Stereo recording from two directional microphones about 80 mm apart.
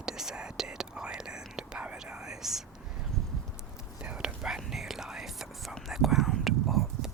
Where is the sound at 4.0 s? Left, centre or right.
Centre.